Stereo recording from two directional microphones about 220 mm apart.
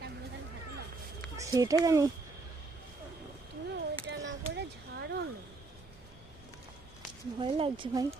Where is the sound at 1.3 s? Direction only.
15° right (ahead or behind).